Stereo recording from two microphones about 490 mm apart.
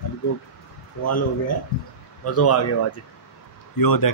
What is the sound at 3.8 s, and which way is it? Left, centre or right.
Speech, left.